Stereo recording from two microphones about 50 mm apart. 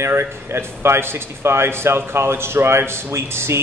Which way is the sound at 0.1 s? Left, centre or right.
Right.